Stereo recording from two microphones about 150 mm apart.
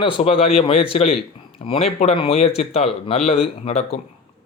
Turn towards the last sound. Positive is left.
turn(degrees=45)  # may be behind; listen again after turning